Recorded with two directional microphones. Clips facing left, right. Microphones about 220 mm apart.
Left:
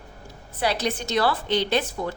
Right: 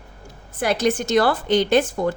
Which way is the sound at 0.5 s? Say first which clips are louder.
Right 5 dB; 50° right (ahead or behind).